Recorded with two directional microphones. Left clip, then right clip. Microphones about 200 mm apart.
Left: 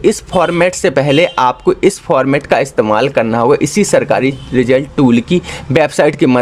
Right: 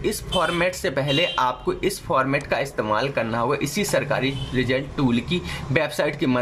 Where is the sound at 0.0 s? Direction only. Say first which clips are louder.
Left 11 dB; 35° left (ahead or behind).